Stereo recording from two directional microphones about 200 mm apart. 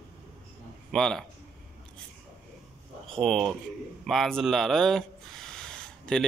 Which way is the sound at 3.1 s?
Centre (ahead or behind).